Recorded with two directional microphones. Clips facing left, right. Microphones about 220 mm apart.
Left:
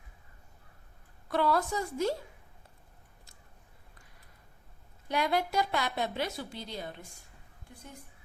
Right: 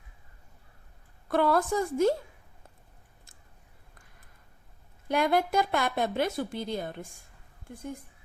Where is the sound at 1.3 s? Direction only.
50° right (ahead or behind).